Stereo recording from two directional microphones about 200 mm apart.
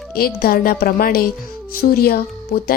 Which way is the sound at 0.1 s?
50° left (ahead or behind).